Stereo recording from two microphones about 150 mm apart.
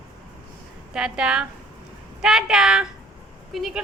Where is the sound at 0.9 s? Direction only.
5° right (ahead or behind).